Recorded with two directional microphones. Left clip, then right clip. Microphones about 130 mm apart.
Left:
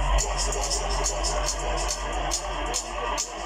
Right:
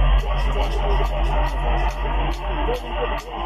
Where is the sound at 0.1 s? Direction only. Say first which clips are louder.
Right 1 dB; 35° left (ahead or behind).